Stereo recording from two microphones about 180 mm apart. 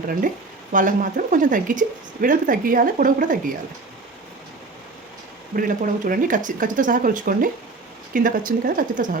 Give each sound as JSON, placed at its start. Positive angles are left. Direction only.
{"t": 0.7, "sound": "speech", "side_deg": -45}
{"t": 5.5, "sound": "speech", "side_deg": -50}